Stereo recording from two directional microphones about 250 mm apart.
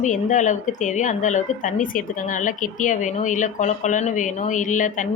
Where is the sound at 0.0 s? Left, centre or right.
Left.